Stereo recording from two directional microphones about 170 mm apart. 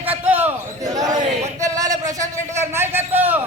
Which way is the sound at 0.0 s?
10° right (ahead or behind).